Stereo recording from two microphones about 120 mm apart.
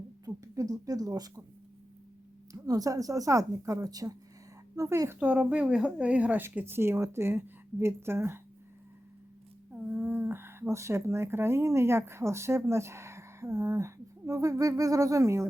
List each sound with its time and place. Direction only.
0.3 s a sound: 30° right (ahead or behind)
2.5 s speech: 30° right (ahead or behind)
9.7 s speech: 15° right (ahead or behind)